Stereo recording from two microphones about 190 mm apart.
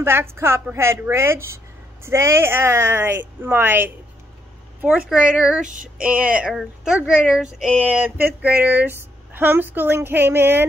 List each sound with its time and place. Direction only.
0.0 s speech: 10° right (ahead or behind)
5.1 s speech: 5° right (ahead or behind)
5.7 s female singing: 45° right (ahead or behind)
6.0 s speech: 5° right (ahead or behind)